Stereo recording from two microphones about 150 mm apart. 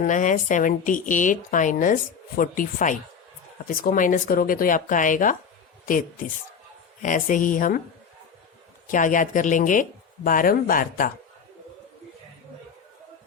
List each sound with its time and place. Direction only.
0.0 s a woman's voice: 60° left (ahead or behind)
8.9 s a woman's voice: 60° left (ahead or behind)